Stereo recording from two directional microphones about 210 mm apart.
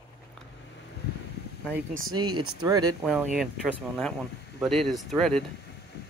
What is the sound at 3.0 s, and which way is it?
Speech, 5° right (ahead or behind).